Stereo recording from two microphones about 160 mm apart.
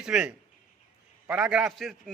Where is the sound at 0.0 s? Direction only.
5° right (ahead or behind).